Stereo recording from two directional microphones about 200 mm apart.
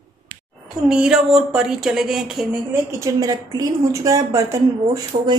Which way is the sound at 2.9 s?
15° right (ahead or behind).